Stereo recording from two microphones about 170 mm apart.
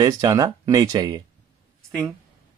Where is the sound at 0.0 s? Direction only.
20° right (ahead or behind).